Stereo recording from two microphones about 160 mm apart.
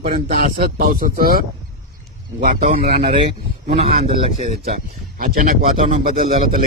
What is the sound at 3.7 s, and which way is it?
Speech, 40° right (ahead or behind).